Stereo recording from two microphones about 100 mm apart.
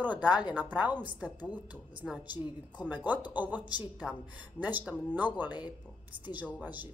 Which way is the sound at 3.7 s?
45° left (ahead or behind).